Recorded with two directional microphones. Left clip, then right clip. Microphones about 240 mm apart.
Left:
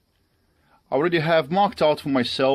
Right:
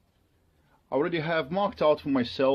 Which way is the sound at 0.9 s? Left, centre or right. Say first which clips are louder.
Left 7 dB; left.